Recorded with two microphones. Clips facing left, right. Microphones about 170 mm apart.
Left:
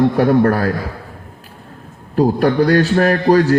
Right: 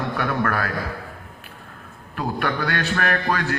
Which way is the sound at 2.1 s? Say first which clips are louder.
Left 11 dB; 35° left (ahead or behind).